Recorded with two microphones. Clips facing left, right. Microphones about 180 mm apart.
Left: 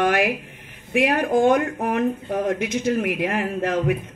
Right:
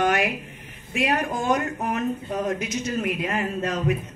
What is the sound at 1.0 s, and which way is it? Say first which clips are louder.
A woman's voice: left 6 dB; 55° left (ahead or behind).